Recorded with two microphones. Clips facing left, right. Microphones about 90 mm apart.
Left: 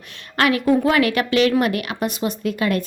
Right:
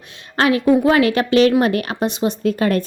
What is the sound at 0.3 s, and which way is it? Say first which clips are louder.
A woman's voice: right 3 dB; 30° right (ahead or behind).